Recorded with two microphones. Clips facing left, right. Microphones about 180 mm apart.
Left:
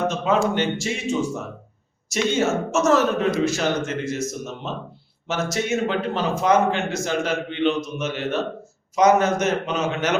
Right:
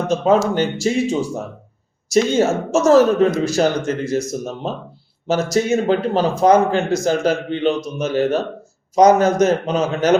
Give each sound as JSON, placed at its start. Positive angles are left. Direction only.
{"t": 0.1, "sound": "speech", "side_deg": -35}